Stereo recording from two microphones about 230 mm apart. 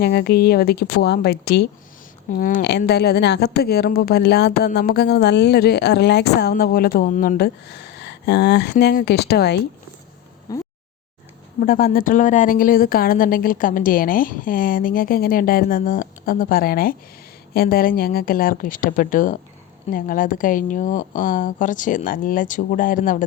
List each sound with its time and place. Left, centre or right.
0.0 s speech: left
10.5 s a sound: centre
11.6 s speech: left